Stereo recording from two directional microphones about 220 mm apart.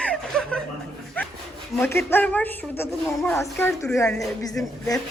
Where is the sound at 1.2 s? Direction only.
10° left (ahead or behind).